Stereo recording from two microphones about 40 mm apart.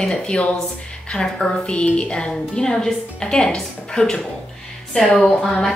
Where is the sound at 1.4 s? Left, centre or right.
Left.